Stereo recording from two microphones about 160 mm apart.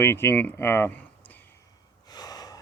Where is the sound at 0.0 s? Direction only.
15° left (ahead or behind).